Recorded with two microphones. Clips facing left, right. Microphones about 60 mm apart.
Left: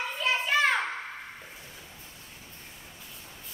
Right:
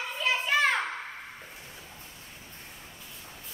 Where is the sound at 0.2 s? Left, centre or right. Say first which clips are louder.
Even; centre.